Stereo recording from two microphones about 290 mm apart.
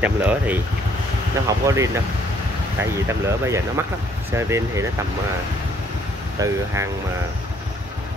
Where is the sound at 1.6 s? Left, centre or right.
Centre.